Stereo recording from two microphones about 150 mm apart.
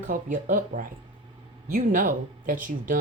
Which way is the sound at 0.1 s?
60° right (ahead or behind).